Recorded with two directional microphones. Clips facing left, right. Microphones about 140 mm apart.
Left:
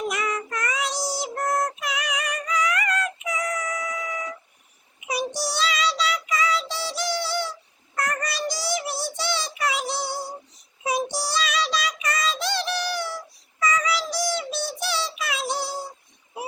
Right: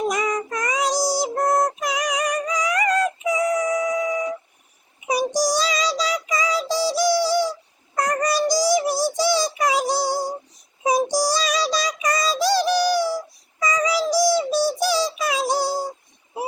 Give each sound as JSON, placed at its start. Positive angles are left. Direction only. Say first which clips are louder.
{"t": 0.0, "sound": "synthetic singing", "louder": "right 5 dB", "side_deg": -40}
{"t": 5.0, "sound": "child singing", "louder": "right 7 dB", "side_deg": -40}
{"t": 8.2, "sound": "synthetic singing", "louder": "right 9 dB", "side_deg": -40}